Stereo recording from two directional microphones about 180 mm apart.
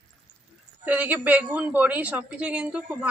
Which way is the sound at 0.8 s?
10° right (ahead or behind).